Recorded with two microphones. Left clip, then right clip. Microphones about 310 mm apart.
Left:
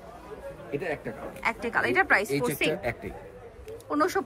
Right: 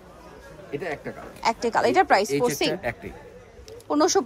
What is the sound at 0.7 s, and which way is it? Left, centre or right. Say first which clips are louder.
A woman's voice: right 1 dB; centre.